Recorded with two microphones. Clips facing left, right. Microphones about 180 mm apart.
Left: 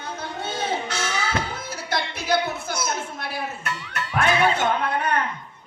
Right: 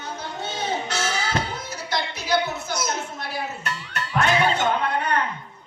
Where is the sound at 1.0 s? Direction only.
30° right (ahead or behind).